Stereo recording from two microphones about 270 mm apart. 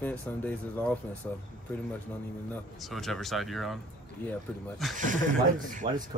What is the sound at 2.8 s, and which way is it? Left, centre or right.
Speech, centre.